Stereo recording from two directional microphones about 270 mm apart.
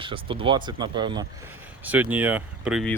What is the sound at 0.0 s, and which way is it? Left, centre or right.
A man's voice, centre.